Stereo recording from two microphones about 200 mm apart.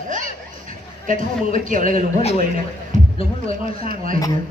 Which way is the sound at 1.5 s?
40° right (ahead or behind).